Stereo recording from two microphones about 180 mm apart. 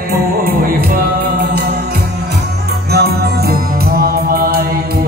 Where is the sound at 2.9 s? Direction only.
60° right (ahead or behind).